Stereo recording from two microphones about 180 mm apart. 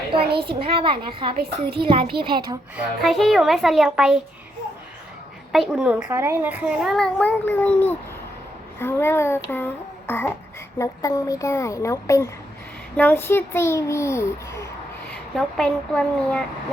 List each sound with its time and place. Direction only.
0.3 s a child's voice: 60° right (ahead or behind)
0.6 s a woman's voice: 30° right (ahead or behind)
2.7 s a child's voice: centre (ahead or behind)
5.5 s a child's voice: 5° right (ahead or behind); by 14.6 s 15° left (ahead or behind)
15.4 s a child's voice: 5° left (ahead or behind)